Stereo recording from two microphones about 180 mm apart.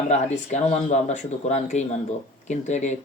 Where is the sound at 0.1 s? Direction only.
40° left (ahead or behind).